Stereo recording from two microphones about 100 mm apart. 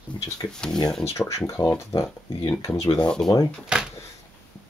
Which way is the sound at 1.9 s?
60° left (ahead or behind).